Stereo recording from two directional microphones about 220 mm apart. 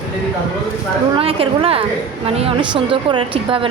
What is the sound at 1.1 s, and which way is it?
A woman's voice, 25° right (ahead or behind).